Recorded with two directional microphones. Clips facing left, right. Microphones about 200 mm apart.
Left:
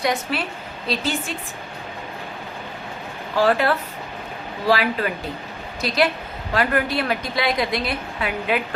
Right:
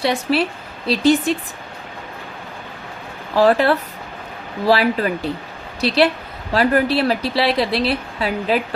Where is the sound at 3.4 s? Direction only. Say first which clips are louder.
Right 4 dB; 35° right (ahead or behind).